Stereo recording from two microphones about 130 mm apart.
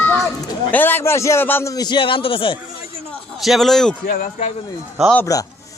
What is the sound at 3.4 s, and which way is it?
Speech, centre (ahead or behind).